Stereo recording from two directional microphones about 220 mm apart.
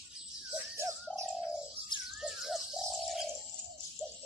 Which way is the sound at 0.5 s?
10° right (ahead or behind).